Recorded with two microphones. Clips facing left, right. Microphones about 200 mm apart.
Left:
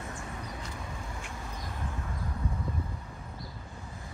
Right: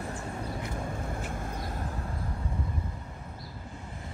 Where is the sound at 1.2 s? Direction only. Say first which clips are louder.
Right 6 dB; 50° right (ahead or behind).